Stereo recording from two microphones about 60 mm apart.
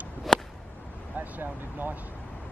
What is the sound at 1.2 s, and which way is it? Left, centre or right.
Speech, right.